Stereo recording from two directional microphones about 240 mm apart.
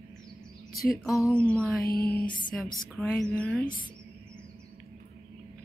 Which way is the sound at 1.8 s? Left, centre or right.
Left.